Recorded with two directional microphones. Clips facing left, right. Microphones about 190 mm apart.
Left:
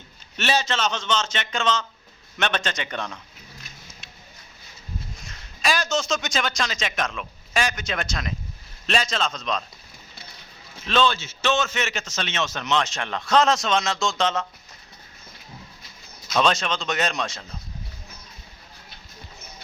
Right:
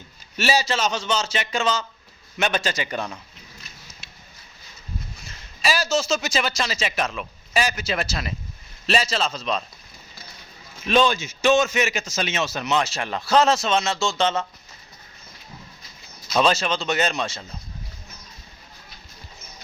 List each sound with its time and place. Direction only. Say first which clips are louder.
0.3 s a man's voice: right 2 dB; 10° right (ahead or behind)
5.2 s a man's voice: right 1 dB; 5° right (ahead or behind)
10.8 s a man's voice: right 3 dB; 15° right (ahead or behind)
16.3 s speech: right 2 dB; 5° right (ahead or behind)